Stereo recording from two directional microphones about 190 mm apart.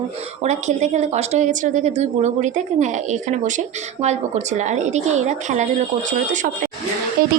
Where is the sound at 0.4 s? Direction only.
35° right (ahead or behind).